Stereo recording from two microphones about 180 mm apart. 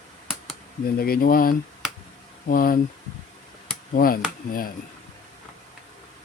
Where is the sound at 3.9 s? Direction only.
55° left (ahead or behind).